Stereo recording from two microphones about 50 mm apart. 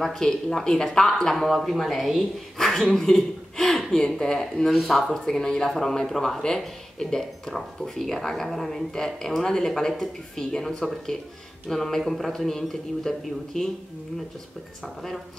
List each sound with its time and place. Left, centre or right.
0.0 s speech: centre
2.6 s speech: centre
4.6 s speech: centre
5.1 s speech: centre